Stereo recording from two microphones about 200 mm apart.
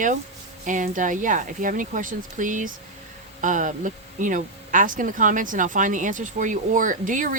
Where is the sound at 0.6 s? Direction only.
40° right (ahead or behind).